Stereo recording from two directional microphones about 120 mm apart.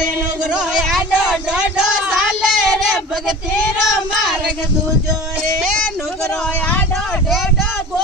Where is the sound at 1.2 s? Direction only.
5° right (ahead or behind).